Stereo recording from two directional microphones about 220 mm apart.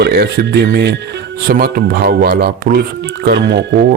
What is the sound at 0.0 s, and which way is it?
Speech, 45° right (ahead or behind).